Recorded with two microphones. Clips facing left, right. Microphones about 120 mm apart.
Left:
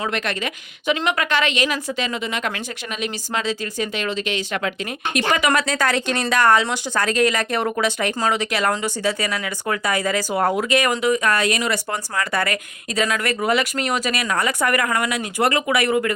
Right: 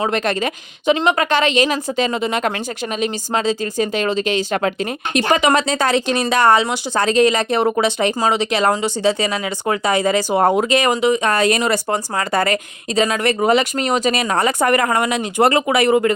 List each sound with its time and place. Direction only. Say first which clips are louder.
0.0 s a woman's voice: right 6 dB; 35° right (ahead or behind)
5.1 s speech: right 4 dB; 25° right (ahead or behind)